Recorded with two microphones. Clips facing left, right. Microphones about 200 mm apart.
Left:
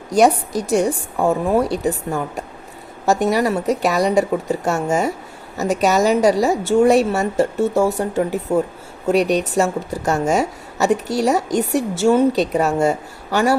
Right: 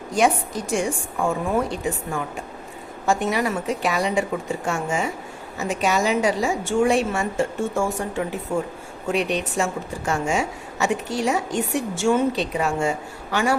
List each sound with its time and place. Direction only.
0.1 s a woman's voice: 40° left (ahead or behind)